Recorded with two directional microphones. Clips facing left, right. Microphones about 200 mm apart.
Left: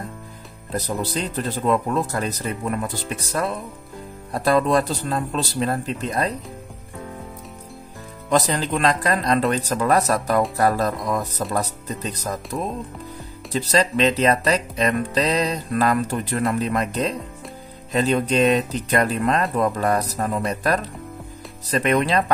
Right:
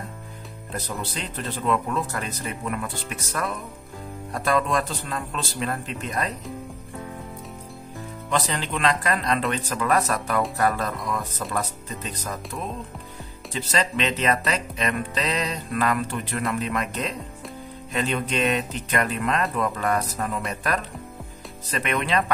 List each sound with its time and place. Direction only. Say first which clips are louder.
0.7 s speech: left 6 dB; 40° left (ahead or behind)
8.3 s speech: left 6 dB; 40° left (ahead or behind)